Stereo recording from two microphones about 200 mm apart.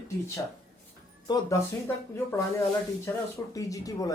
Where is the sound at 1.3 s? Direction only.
20° left (ahead or behind).